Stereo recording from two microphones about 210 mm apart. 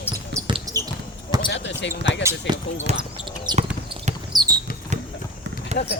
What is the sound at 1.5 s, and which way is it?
Speech, 60° left (ahead or behind).